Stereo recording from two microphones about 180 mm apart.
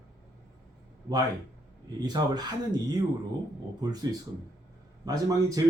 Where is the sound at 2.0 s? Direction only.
20° right (ahead or behind).